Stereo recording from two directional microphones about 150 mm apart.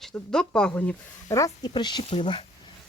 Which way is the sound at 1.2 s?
25° left (ahead or behind).